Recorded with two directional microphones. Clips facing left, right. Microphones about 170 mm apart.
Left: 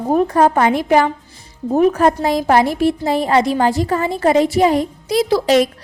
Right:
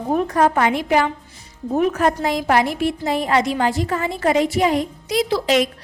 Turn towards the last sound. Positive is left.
turn(degrees=35)  # may be behind; listen again after turning